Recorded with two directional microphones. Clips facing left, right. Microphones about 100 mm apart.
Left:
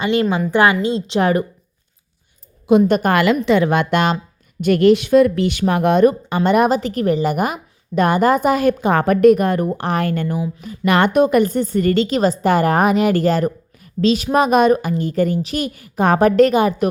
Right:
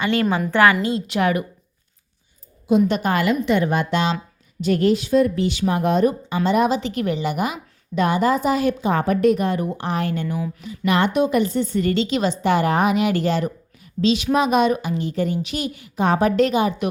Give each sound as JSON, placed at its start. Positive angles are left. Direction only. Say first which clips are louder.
{"t": 0.0, "sound": "a woman's voice", "louder": "left 3 dB", "side_deg": 20}
{"t": 2.8, "sound": "a woman's voice", "louder": "left 5 dB", "side_deg": 50}
{"t": 3.2, "sound": "a woman's voice", "louder": "left 4 dB", "side_deg": 80}
{"t": 4.6, "sound": "a woman's voice", "louder": "left 6 dB", "side_deg": 70}